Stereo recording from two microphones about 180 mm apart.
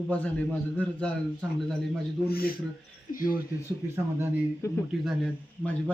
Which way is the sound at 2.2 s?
55° left (ahead or behind).